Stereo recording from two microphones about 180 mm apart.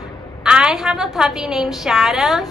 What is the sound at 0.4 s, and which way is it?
A woman's voice, 5° right (ahead or behind).